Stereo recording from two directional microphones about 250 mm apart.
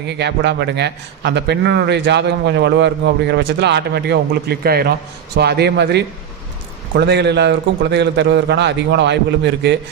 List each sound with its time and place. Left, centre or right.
0.0 s a man's voice: right